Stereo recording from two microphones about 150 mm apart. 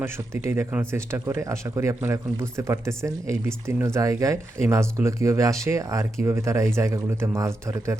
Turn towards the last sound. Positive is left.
turn(degrees=-20)  # may be behind; listen again after turning